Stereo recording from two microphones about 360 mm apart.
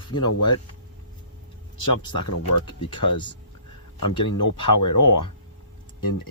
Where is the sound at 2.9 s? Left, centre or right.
Centre.